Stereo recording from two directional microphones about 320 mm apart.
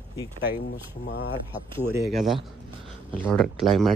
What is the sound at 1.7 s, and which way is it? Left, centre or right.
Speech, centre.